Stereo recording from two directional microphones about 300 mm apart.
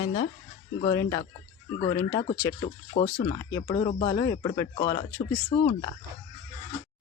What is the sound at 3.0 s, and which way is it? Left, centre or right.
Speech, left.